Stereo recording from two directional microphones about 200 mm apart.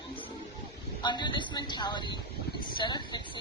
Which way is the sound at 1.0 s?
25° left (ahead or behind).